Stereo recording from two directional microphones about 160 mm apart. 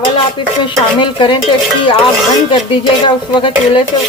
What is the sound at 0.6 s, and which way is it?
Stir, 30° left (ahead or behind).